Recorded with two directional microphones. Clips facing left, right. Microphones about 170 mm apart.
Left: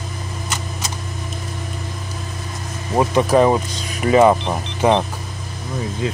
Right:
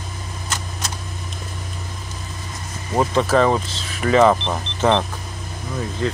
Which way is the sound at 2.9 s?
15° left (ahead or behind).